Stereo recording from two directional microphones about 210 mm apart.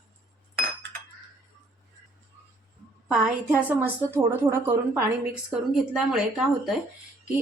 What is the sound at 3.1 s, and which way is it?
A woman's voice, 5° right (ahead or behind).